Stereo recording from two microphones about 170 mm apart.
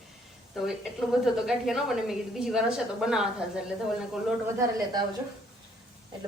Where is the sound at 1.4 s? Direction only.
Centre (ahead or behind).